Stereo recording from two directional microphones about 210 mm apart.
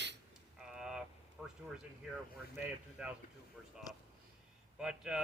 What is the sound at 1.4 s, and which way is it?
Speech, 5° right (ahead or behind).